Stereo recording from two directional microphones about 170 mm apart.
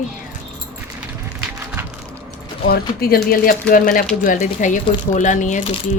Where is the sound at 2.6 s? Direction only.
65° left (ahead or behind); by 5.7 s 45° left (ahead or behind).